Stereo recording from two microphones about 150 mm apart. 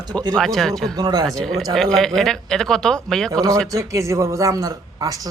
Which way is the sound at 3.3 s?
25° right (ahead or behind).